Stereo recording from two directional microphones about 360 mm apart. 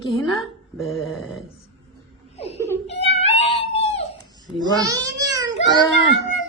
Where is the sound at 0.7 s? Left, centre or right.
Centre.